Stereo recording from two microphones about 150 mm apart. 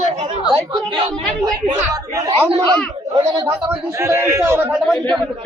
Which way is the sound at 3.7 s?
20° right (ahead or behind).